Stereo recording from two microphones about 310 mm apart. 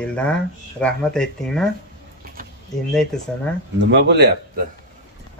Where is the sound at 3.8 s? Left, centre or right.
Right.